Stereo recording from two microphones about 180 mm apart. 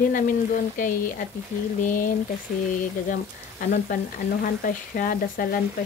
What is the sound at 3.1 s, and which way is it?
Speech, 50° left (ahead or behind).